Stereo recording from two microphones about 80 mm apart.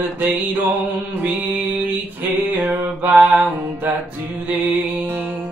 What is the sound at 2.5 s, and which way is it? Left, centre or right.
Mantra, centre.